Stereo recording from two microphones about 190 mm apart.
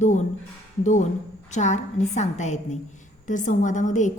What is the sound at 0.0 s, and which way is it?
Speech, 40° left (ahead or behind).